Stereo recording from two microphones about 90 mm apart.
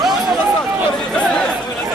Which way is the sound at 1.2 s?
10° left (ahead or behind).